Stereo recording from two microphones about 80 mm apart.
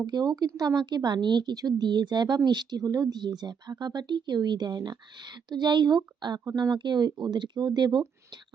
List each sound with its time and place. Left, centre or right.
0.0 s a woman's voice: right